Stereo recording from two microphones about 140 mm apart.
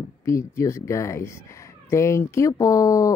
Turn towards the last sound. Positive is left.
turn(degrees=25)  # may be behind; listen again after turning